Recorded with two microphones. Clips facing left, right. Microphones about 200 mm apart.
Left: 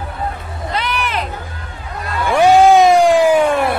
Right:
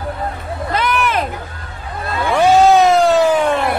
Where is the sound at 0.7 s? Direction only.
45° right (ahead or behind).